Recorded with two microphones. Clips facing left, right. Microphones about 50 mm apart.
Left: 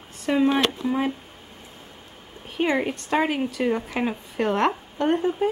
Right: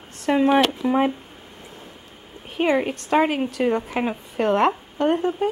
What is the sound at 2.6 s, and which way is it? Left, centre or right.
A woman's voice, centre.